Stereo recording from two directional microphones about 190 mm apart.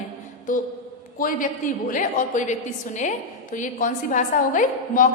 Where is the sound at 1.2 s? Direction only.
45° left (ahead or behind).